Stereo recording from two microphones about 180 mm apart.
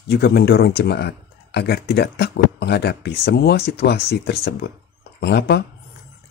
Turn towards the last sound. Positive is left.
turn(degrees=65)  # may be behind; listen again after turning